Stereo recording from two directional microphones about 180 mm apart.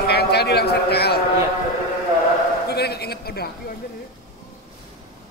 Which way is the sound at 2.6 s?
65° left (ahead or behind).